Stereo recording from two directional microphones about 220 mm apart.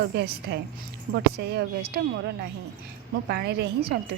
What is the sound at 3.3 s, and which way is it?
Speech, 45° right (ahead or behind).